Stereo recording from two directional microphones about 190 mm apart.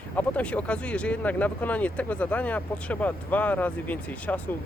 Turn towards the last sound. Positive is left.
turn(degrees=10)  # may be behind; listen again after turning